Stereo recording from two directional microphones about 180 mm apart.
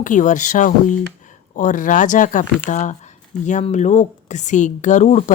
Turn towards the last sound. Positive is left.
turn(degrees=40)  # may be behind; listen again after turning